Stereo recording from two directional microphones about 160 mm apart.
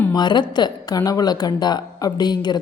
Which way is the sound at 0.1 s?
25° left (ahead or behind).